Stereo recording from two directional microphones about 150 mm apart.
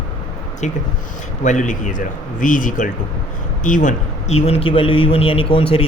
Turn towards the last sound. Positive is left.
turn(degrees=40)  # may be behind; listen again after turning